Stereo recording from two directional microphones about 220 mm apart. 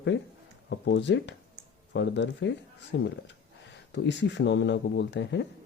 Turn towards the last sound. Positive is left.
turn(degrees=55)  # may be behind; listen again after turning